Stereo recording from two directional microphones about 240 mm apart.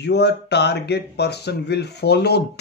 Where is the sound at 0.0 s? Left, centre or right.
Left.